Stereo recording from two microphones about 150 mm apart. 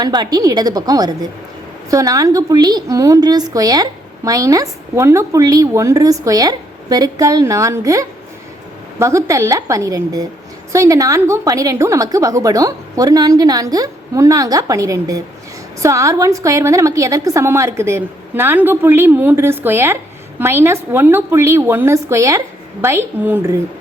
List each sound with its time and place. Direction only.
0.0 s a woman's voice: 25° right (ahead or behind)